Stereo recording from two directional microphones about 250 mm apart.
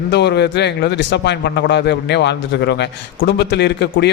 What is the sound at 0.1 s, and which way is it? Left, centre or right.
A man's voice, left.